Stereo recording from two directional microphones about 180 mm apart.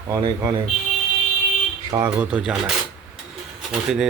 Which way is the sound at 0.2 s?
25° right (ahead or behind).